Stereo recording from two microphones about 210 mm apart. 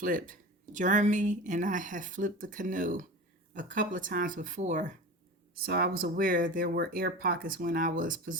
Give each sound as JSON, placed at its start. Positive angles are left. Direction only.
{"t": 0.0, "sound": "speech", "side_deg": -40}
{"t": 5.6, "sound": "speech", "side_deg": -50}